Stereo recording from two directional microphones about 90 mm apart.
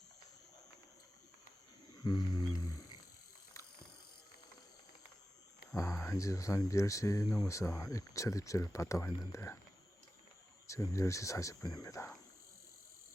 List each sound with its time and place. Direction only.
2.0 s wild animals: 55° left (ahead or behind)
5.7 s speech: 35° left (ahead or behind)
10.7 s speech: 35° left (ahead or behind)